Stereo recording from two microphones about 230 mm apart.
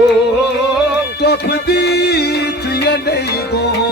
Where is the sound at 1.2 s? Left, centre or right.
Left.